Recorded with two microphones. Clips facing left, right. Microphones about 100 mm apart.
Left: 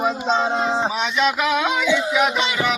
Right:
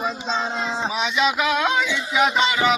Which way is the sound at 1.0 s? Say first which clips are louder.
Left 1 dB; centre (ahead or behind).